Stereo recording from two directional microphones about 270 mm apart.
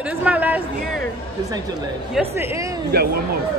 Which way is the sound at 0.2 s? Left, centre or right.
Centre.